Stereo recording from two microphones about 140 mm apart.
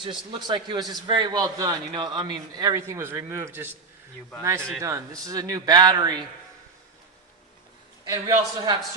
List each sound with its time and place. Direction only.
0.0 s a man's voice: 35° right (ahead or behind); by 3.8 s 15° right (ahead or behind)
4.8 s speech: 25° right (ahead or behind)
8.0 s speech: 25° right (ahead or behind)